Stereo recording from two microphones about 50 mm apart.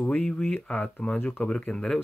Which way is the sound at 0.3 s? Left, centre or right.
Centre.